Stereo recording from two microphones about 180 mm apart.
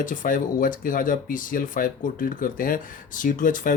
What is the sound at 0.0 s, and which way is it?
Speech, 45° left (ahead or behind).